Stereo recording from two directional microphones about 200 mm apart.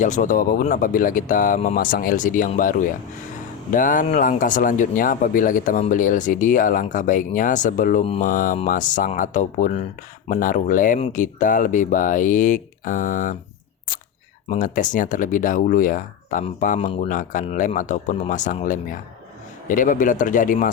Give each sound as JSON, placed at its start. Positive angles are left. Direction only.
{"t": 0.0, "sound": "speech", "side_deg": 40}
{"t": 14.5, "sound": "speech", "side_deg": 40}